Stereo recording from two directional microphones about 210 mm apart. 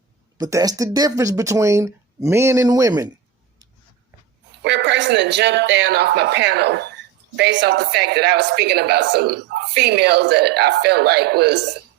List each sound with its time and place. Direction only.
0.3 s speech: 20° right (ahead or behind)
4.6 s a woman's voice: 55° right (ahead or behind)